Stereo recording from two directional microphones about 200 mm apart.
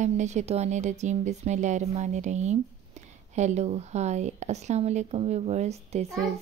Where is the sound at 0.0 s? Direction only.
35° right (ahead or behind).